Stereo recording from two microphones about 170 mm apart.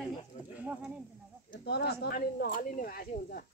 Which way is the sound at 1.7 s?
75° left (ahead or behind).